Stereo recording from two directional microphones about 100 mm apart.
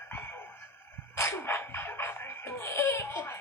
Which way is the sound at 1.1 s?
25° left (ahead or behind).